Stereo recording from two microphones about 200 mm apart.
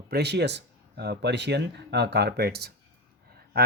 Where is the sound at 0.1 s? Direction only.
55° right (ahead or behind).